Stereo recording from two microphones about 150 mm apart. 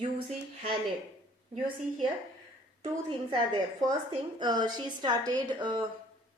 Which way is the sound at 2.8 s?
40° right (ahead or behind).